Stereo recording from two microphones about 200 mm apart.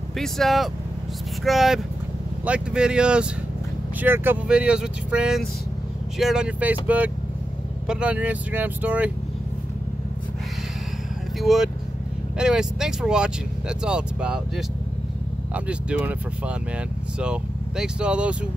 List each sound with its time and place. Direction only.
0.2 s speech: centre (ahead or behind)
11.4 s speech: centre (ahead or behind)
15.5 s speech: 5° right (ahead or behind)